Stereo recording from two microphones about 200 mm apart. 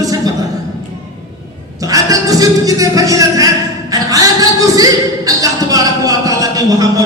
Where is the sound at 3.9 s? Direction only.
15° right (ahead or behind).